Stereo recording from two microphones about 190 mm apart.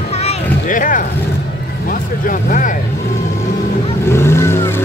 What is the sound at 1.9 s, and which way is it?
Vehicle, 45° left (ahead or behind).